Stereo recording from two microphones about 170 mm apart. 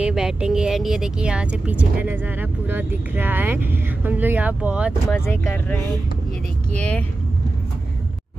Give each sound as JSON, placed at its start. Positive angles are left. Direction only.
{"t": 0.0, "sound": "speech", "side_deg": -5}
{"t": 6.8, "sound": "speech", "side_deg": 10}